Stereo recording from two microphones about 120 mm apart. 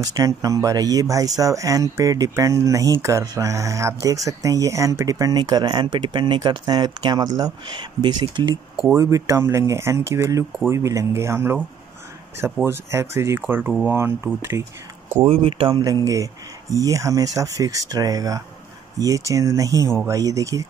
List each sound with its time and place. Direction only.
0.0 s speech: 30° right (ahead or behind)
8.9 s speech: 25° right (ahead or behind)
12.6 s speech: 20° right (ahead or behind)
15.2 s speech: 50° right (ahead or behind)
15.7 s speech: 30° right (ahead or behind)